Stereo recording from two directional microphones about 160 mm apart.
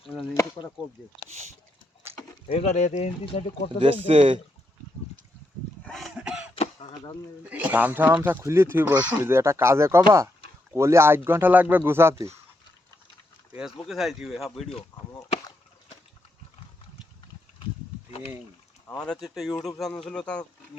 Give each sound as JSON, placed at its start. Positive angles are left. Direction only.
{"t": 2.5, "sound": "speech", "side_deg": 40}
{"t": 3.8, "sound": "speech", "side_deg": -35}
{"t": 5.8, "sound": "a sound", "side_deg": 0}
{"t": 6.5, "sound": "throat clearing", "side_deg": 35}
{"t": 7.5, "sound": "speech", "side_deg": -10}
{"t": 13.5, "sound": "speech", "side_deg": -5}
{"t": 18.9, "sound": "speech", "side_deg": 5}